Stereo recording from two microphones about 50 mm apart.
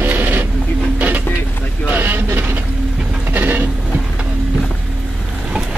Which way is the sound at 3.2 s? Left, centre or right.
Right.